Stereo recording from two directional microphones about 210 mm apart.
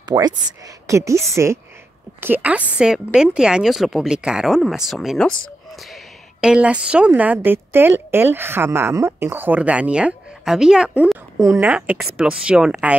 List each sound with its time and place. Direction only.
0.1 s a woman's voice: 20° right (ahead or behind); by 12.9 s 5° right (ahead or behind)